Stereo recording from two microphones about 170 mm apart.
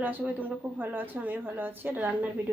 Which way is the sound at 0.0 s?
10° right (ahead or behind).